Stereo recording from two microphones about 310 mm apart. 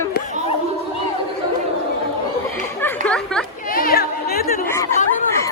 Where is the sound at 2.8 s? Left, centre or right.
Centre.